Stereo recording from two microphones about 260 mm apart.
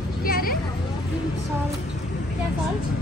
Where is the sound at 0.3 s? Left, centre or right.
Left.